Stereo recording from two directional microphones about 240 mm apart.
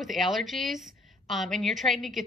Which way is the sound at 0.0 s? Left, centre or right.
Centre.